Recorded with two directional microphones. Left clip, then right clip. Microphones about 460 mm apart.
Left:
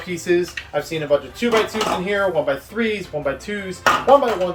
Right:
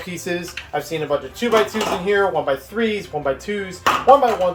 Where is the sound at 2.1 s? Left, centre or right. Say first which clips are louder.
Right 3 dB; centre.